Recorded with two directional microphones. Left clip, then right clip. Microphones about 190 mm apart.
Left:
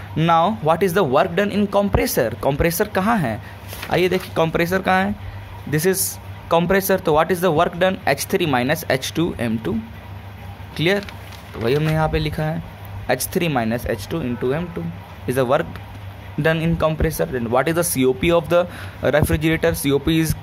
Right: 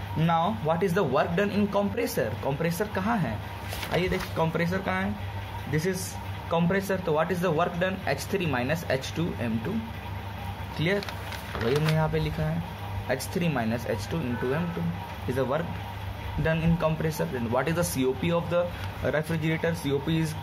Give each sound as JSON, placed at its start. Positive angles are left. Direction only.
{"t": 0.2, "sound": "speech", "side_deg": 55}
{"t": 10.8, "sound": "speech", "side_deg": 50}